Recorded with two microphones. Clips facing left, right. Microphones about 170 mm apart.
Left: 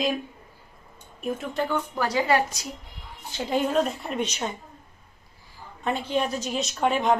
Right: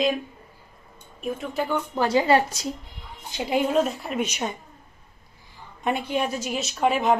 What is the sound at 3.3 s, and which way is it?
Speech, 15° right (ahead or behind).